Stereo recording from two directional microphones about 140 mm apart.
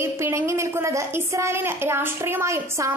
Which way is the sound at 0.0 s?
20° right (ahead or behind).